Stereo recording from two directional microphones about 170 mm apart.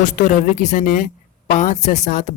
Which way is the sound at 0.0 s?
45° left (ahead or behind).